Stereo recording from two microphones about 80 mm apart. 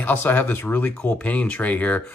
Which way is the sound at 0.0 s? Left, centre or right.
Left.